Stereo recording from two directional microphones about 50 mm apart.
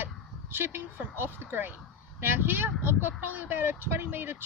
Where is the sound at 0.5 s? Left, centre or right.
Right.